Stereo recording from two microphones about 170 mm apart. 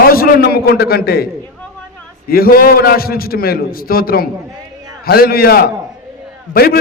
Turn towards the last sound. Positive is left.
turn(degrees=60)  # may be behind; listen again after turning